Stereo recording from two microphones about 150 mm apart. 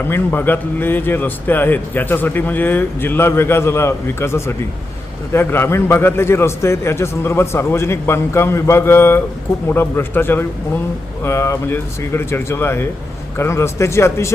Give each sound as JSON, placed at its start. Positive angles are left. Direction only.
{"t": 0.1, "sound": "a man's voice", "side_deg": 15}